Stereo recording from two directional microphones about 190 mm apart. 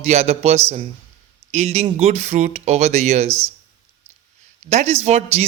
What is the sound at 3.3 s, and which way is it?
Speech, 15° right (ahead or behind).